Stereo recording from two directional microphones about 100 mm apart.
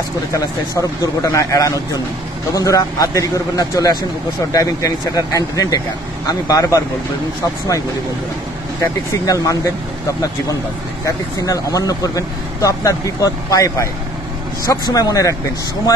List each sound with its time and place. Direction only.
0.3 s speech: 35° left (ahead or behind)
9.2 s speech: 35° left (ahead or behind)
11.3 s speech: 35° left (ahead or behind)